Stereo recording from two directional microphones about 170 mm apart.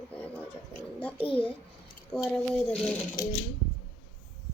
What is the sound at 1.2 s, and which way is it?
Speech, 30° left (ahead or behind).